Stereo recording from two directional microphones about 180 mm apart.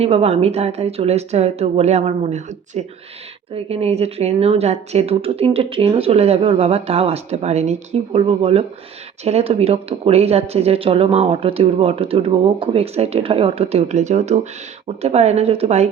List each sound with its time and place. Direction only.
0.0 s speech: 35° right (ahead or behind)